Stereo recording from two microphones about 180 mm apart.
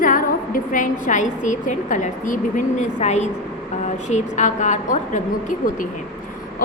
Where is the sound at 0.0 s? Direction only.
50° left (ahead or behind).